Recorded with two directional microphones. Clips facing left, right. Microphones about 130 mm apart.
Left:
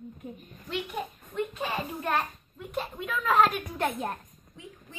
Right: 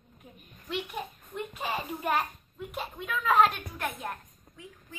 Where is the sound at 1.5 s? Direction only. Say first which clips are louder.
Left 1 dB; 5° right (ahead or behind).